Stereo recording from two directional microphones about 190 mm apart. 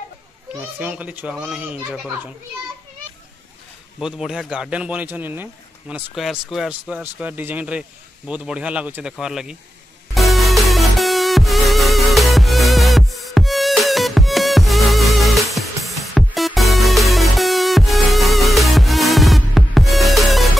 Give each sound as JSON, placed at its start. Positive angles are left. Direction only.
{"t": 0.6, "sound": "speech", "side_deg": -10}
{"t": 4.0, "sound": "speech", "side_deg": -5}
{"t": 10.1, "sound": "music", "side_deg": 0}